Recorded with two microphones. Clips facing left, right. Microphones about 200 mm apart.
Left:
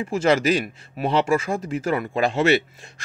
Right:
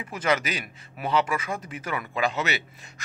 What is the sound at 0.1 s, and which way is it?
Speech, 30° left (ahead or behind).